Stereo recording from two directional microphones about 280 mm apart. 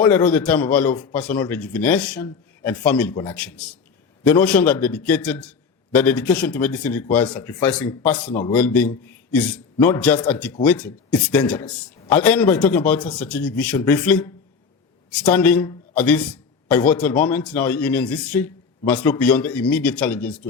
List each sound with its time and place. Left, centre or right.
0.0 s a man's voice: centre